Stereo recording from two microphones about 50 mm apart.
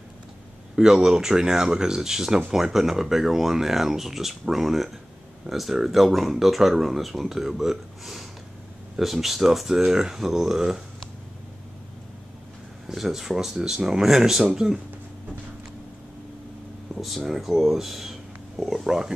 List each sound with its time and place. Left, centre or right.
0.7 s speech: centre
12.8 s speech: centre
17.2 s speech: centre